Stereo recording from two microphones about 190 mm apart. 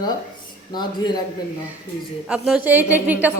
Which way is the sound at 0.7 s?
20° left (ahead or behind).